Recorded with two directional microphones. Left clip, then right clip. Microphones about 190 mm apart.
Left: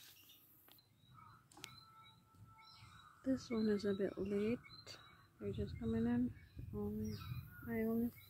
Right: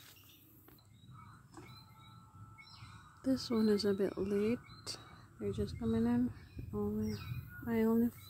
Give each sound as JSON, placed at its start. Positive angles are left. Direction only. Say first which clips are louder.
{"t": 3.2, "sound": "speech", "louder": "right 6 dB", "side_deg": -10}
{"t": 5.9, "sound": "a sound", "louder": "right 5 dB", "side_deg": -10}
{"t": 7.6, "sound": "speech", "louder": "right 8 dB", "side_deg": -20}